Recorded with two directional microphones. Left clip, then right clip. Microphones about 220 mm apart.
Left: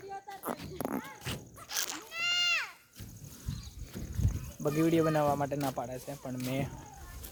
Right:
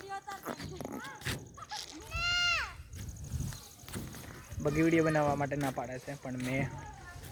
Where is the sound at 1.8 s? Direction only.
40° left (ahead or behind).